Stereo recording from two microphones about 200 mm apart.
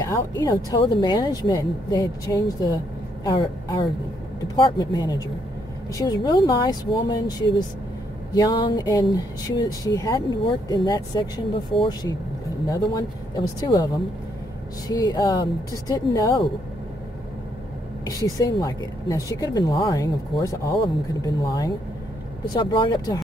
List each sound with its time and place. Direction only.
0.0 s speech: 15° left (ahead or behind)
14.9 s speech: 20° left (ahead or behind)
18.4 s speech: 20° left (ahead or behind)